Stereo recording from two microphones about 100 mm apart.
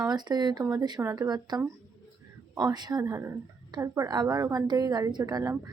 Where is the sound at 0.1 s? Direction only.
45° right (ahead or behind).